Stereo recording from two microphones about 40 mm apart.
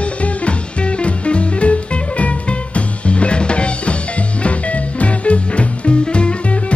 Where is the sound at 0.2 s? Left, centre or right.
Left.